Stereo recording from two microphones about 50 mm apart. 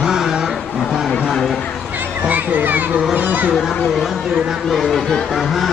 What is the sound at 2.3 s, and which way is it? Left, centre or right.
A child's voice, right.